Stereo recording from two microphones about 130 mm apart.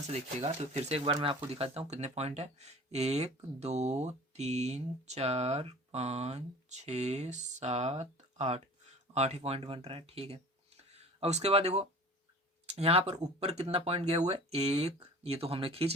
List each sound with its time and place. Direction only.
0.1 s speech: 55° right (ahead or behind)
1.1 s speech: 40° right (ahead or behind)